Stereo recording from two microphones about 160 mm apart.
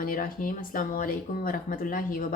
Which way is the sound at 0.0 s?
60° left (ahead or behind).